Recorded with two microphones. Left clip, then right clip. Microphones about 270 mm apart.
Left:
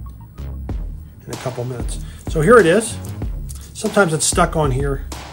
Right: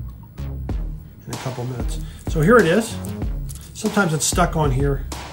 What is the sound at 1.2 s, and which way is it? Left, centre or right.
Speech, centre.